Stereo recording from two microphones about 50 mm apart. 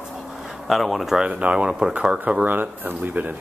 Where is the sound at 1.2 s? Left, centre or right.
Right.